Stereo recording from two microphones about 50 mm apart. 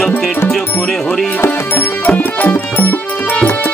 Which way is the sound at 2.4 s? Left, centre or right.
Left.